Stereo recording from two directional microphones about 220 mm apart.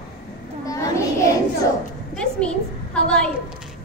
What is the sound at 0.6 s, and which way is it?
Children playing, 15° left (ahead or behind).